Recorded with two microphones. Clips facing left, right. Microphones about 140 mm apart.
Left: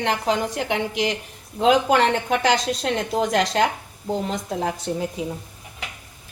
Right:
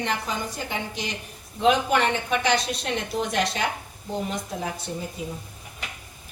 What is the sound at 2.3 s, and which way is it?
A woman's voice, 90° left.